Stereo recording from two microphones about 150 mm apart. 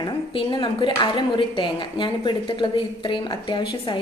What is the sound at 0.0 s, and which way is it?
Speech, 35° left (ahead or behind).